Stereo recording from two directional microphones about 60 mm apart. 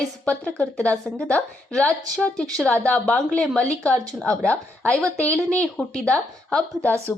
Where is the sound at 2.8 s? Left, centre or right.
Left.